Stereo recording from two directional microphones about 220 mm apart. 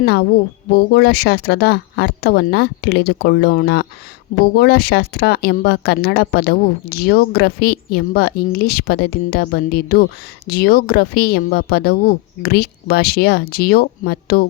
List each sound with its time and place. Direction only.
0.0 s a woman's voice: 45° left (ahead or behind)